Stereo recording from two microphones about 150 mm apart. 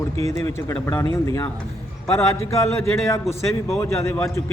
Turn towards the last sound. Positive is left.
turn(degrees=20)  # may be behind; listen again after turning